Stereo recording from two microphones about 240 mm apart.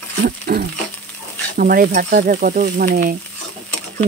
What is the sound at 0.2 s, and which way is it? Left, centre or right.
Speech, right.